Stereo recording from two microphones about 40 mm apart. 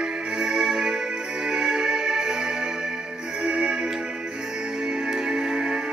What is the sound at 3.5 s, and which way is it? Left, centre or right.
Music, right.